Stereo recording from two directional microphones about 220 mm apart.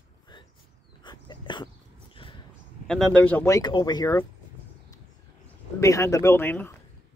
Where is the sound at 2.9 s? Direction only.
5° left (ahead or behind).